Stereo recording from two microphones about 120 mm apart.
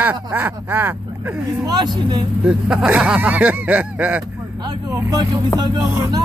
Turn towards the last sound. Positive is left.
turn(degrees=-35)  # may be behind; listen again after turning